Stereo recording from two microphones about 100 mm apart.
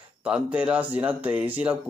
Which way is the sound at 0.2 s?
15° right (ahead or behind).